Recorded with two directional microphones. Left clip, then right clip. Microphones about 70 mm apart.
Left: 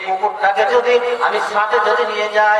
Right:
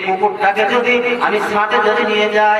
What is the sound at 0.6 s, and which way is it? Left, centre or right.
A man's voice, left.